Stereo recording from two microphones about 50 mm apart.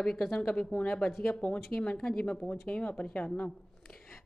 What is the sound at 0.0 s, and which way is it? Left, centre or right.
Speech, centre.